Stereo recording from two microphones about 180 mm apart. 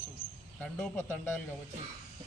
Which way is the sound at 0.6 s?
10° left (ahead or behind).